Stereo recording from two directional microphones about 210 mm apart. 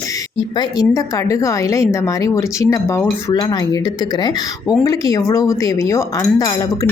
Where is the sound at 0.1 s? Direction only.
20° left (ahead or behind).